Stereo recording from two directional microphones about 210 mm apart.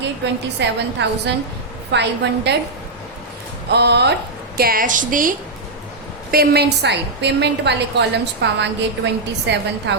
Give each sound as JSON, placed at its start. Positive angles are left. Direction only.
{"t": 0.6, "sound": "a woman's voice", "side_deg": -55}
{"t": 3.7, "sound": "a woman's voice", "side_deg": -50}
{"t": 6.3, "sound": "a woman's voice", "side_deg": -50}